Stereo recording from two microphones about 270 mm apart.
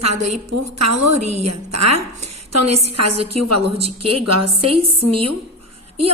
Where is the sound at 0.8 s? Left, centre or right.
Right.